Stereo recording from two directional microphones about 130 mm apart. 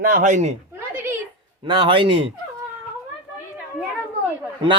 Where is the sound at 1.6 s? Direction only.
40° right (ahead or behind).